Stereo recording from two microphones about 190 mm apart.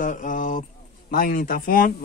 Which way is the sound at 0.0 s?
45° left (ahead or behind).